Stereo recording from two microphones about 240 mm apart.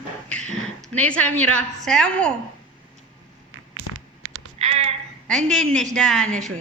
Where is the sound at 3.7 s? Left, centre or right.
Right.